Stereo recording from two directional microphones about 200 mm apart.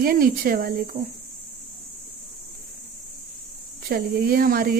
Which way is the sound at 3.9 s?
50° right (ahead or behind).